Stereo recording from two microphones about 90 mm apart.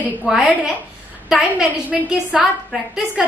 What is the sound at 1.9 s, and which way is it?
Speech, 15° right (ahead or behind).